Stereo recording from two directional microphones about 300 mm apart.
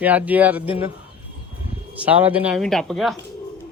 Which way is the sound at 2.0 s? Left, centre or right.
Centre.